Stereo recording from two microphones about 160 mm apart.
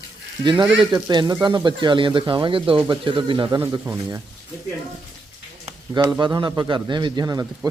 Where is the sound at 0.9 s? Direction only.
25° right (ahead or behind).